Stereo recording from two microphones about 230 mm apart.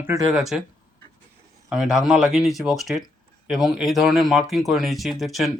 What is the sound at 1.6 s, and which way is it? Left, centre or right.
Speech, centre.